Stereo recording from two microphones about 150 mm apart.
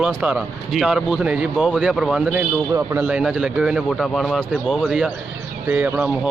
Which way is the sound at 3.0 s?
5° right (ahead or behind).